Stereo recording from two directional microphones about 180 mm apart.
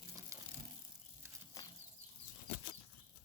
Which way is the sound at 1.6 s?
20° left (ahead or behind).